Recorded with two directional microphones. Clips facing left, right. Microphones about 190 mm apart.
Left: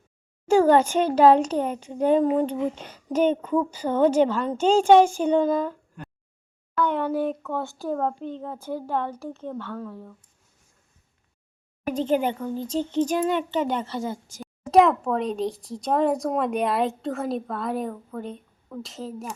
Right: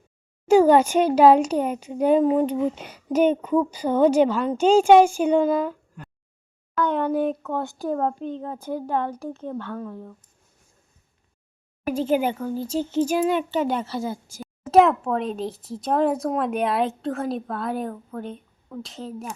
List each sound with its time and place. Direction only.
0.4 s speech: 15° right (ahead or behind)
11.9 s speech: 5° right (ahead or behind)